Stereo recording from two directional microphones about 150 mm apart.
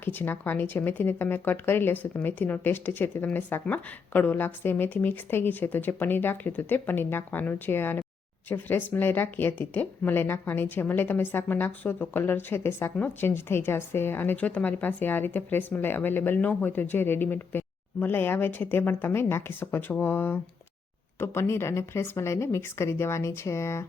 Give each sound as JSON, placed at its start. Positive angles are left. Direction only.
{"t": 0.0, "sound": "speech", "side_deg": 15}